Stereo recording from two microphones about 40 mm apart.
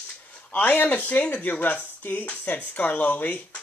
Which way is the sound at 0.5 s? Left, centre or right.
Left.